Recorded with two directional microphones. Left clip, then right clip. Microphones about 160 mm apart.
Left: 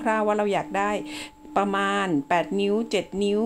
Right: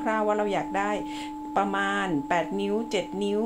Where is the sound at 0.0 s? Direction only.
45° left (ahead or behind).